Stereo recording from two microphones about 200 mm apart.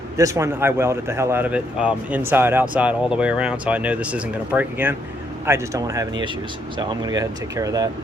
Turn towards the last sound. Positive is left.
turn(degrees=-15)  # may be behind; listen again after turning